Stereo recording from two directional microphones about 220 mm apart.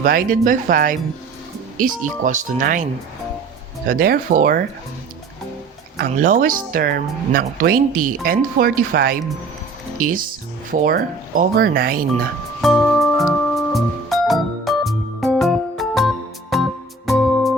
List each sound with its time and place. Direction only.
0.0 s speech: 40° right (ahead or behind)
3.8 s speech: 40° right (ahead or behind)
6.0 s speech: 35° right (ahead or behind)
12.6 s music: centre (ahead or behind)